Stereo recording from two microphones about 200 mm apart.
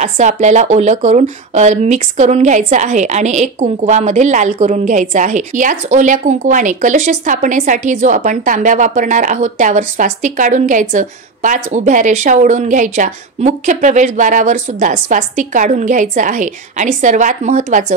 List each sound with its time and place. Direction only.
0.0 s speech: 35° right (ahead or behind)